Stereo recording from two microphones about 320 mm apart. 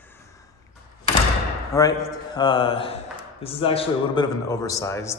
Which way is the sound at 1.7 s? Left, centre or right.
Centre.